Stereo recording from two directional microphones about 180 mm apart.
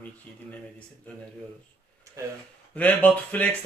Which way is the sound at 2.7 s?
10° left (ahead or behind).